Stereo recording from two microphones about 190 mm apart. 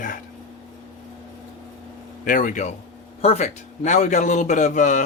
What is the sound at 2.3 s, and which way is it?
A man's voice, 45° left (ahead or behind).